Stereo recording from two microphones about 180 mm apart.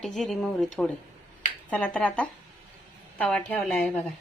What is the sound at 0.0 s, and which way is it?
A woman's voice, centre (ahead or behind).